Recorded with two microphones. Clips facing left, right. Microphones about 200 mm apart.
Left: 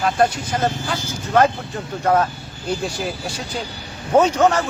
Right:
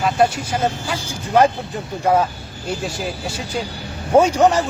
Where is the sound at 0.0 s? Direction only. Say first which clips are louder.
Right 1 dB; 10° right (ahead or behind).